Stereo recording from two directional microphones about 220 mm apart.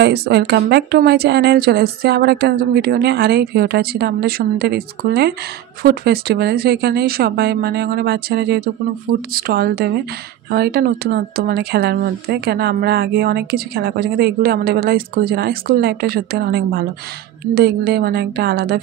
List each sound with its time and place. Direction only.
0.0 s speech: 50° right (ahead or behind)